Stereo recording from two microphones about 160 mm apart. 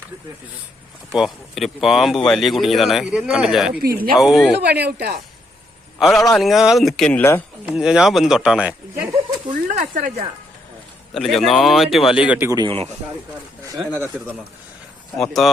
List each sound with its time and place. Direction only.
1.1 s speech: centre (ahead or behind)
3.8 s speech: 70° right (ahead or behind)
4.1 s speech: centre (ahead or behind)
4.6 s speech: 90° right
6.0 s speech: centre (ahead or behind)
7.6 s speech: 5° right (ahead or behind)
9.5 s a sound: 50° right (ahead or behind)
11.1 s speech: centre (ahead or behind)
12.5 s speech: 25° right (ahead or behind)
14.1 s speech: 10° right (ahead or behind)